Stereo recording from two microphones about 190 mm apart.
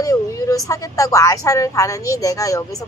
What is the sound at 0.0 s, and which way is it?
A woman's voice, 15° left (ahead or behind).